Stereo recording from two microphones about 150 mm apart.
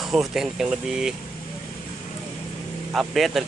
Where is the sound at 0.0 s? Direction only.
Centre (ahead or behind).